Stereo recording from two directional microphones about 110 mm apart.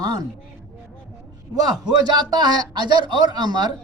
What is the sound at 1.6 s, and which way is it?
A man's voice, 35° right (ahead or behind).